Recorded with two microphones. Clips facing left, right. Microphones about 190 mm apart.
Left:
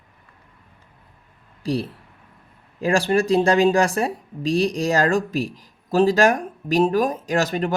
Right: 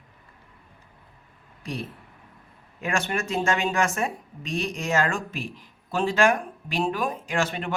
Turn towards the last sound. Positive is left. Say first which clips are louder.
# left 6 dB
turn(degrees=40)  # may be behind; listen again after turning